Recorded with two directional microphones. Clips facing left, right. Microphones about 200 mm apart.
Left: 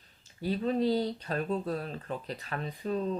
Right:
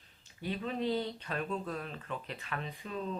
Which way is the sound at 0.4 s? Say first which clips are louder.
Left 6 dB; 35° left (ahead or behind).